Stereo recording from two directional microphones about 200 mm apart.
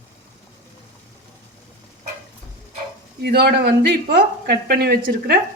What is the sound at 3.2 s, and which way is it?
Speech, 55° right (ahead or behind).